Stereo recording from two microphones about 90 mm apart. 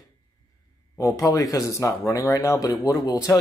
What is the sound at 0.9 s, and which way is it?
Speech, 35° left (ahead or behind).